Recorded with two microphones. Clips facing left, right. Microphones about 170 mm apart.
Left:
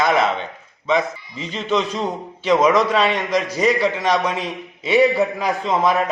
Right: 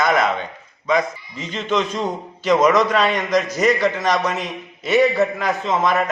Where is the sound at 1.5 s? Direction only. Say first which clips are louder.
Even; 5° left (ahead or behind).